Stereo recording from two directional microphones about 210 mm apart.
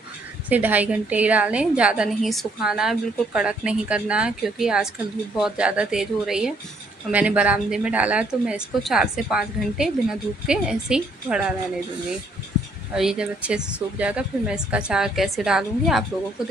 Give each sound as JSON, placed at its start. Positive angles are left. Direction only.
{"t": 0.5, "sound": "speech", "side_deg": -10}
{"t": 12.9, "sound": "speech", "side_deg": -5}